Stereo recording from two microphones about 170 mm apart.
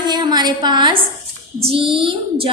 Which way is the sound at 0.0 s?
25° right (ahead or behind).